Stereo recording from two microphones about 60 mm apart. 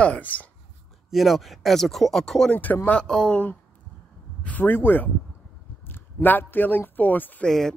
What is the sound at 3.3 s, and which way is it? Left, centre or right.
Speech, left.